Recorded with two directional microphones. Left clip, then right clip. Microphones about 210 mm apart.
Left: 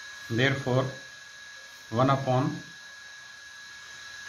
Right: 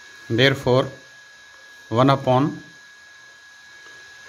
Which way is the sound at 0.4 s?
50° right (ahead or behind).